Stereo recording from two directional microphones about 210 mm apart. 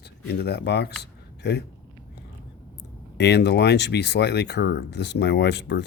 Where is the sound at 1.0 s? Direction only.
50° left (ahead or behind).